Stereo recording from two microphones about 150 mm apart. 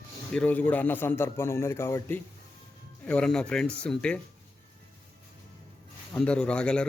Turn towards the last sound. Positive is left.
turn(degrees=5)  # may be behind; listen again after turning